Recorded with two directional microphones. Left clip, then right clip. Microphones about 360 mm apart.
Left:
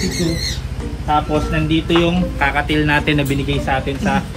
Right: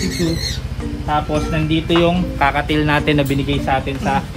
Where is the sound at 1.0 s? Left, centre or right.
Centre.